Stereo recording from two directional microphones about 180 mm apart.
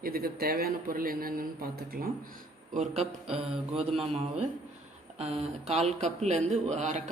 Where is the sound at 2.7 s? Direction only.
40° right (ahead or behind).